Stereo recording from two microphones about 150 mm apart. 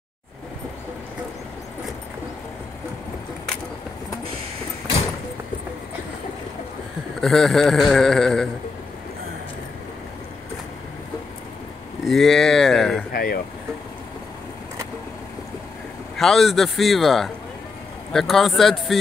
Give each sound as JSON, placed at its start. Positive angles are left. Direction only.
{"t": 7.2, "sound": "a man's voice", "side_deg": 0}
{"t": 12.0, "sound": "a man's voice", "side_deg": 0}
{"t": 13.1, "sound": "speech", "side_deg": 80}
{"t": 16.2, "sound": "a man's voice", "side_deg": 0}